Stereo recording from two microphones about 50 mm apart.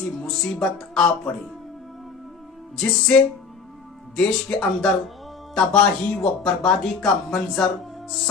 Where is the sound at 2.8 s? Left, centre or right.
Centre.